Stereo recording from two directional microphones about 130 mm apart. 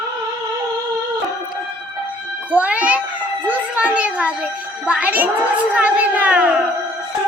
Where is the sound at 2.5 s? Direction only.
10° right (ahead or behind).